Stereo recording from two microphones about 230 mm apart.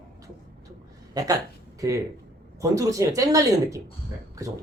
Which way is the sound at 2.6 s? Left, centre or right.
Centre.